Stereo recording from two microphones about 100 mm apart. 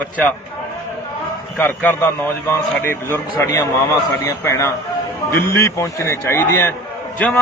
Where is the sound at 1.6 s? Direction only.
20° left (ahead or behind).